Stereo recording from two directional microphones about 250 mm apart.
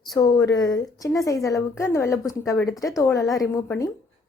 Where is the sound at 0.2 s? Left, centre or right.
Centre.